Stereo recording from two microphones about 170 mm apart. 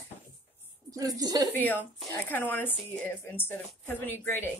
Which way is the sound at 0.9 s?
20° right (ahead or behind).